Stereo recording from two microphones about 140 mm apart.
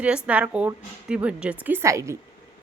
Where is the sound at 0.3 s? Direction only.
10° right (ahead or behind).